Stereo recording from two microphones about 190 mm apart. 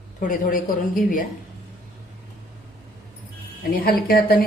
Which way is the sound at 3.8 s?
50° left (ahead or behind).